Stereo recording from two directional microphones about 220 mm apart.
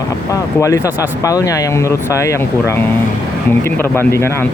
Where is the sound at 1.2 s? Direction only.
15° left (ahead or behind).